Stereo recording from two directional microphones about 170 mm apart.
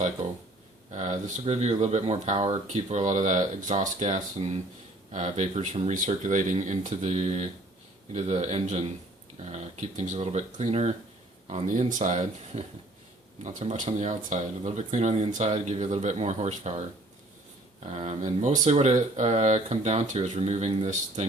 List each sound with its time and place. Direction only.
0.2 s a sound: 40° right (ahead or behind)
0.9 s speech: 45° right (ahead or behind)
17.9 s speech: 40° right (ahead or behind)